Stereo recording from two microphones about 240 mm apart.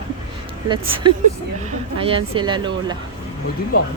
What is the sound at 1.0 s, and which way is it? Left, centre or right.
Speech, centre.